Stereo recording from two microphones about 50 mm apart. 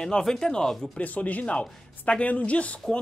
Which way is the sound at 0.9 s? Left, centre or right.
Left.